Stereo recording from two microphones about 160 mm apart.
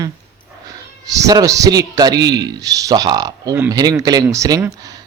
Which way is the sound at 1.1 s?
20° right (ahead or behind).